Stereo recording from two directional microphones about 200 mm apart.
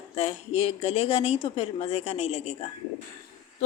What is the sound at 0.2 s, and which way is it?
Speech, 30° left (ahead or behind).